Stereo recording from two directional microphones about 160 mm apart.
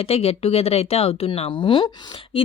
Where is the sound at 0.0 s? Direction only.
40° left (ahead or behind).